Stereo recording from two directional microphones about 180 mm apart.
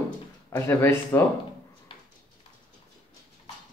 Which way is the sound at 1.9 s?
25° left (ahead or behind).